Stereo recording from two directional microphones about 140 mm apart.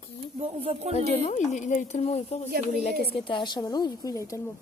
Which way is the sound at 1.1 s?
50° left (ahead or behind).